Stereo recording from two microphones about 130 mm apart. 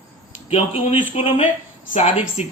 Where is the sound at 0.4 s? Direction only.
45° left (ahead or behind).